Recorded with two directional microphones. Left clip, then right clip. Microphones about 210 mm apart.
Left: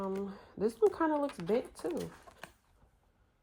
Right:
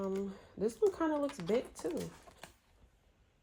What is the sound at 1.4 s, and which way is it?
Speech, centre (ahead or behind).